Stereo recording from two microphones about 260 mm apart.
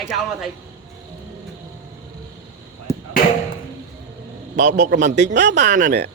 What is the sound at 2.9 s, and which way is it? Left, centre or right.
Chop, centre.